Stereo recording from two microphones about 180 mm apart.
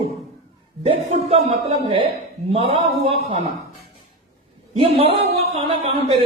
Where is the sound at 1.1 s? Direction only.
35° right (ahead or behind).